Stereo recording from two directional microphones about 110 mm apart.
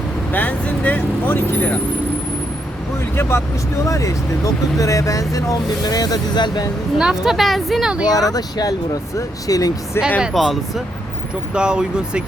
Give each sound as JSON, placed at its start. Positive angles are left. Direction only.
{"t": 0.3, "sound": "speech", "side_deg": 15}
{"t": 3.2, "sound": "speech", "side_deg": 20}
{"t": 7.0, "sound": "speech", "side_deg": -5}
{"t": 8.0, "sound": "speech", "side_deg": 35}
{"t": 10.2, "sound": "speech", "side_deg": 0}